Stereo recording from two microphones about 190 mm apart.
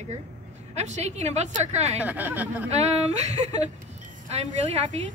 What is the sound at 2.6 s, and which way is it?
A woman's voice, 35° right (ahead or behind).